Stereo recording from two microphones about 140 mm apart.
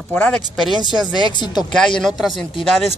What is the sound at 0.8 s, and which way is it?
Speech, 30° left (ahead or behind).